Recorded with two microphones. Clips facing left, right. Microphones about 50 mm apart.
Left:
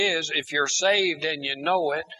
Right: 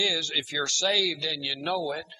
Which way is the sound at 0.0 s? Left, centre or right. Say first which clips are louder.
Left 4 dB; left.